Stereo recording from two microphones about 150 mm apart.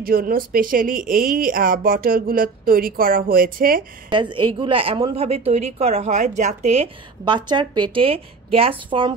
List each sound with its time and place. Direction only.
0.0 s speech: 75° right (ahead or behind)
4.1 s a woman's voice: 35° right (ahead or behind)
7.2 s a woman's voice: 30° right (ahead or behind)